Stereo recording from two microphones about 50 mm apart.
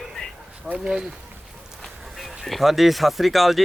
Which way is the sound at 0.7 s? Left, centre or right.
Centre.